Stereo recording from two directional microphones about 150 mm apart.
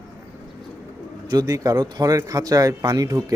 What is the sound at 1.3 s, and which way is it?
Speech, 25° right (ahead or behind).